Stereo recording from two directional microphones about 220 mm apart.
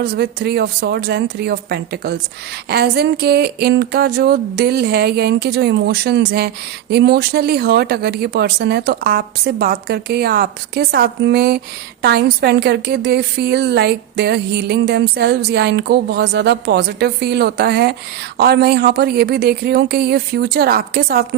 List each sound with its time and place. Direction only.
0.0 s a woman's voice: 45° right (ahead or behind)